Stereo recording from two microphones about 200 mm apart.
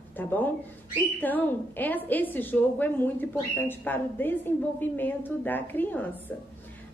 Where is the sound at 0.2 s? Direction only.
10° left (ahead or behind).